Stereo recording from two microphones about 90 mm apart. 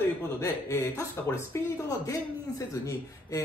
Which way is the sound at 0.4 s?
35° left (ahead or behind).